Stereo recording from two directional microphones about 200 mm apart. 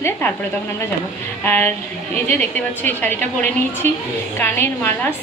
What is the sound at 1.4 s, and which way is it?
A woman's voice, 10° left (ahead or behind).